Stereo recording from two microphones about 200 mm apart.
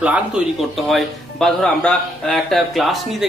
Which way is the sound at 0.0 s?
5° right (ahead or behind).